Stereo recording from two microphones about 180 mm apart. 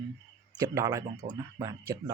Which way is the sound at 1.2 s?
45° right (ahead or behind).